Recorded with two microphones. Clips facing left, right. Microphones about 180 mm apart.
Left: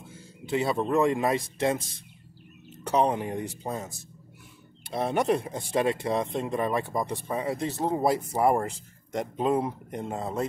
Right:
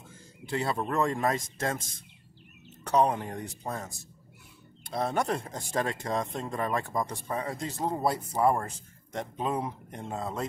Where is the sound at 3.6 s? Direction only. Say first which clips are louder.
Left 3 dB; 10° left (ahead or behind).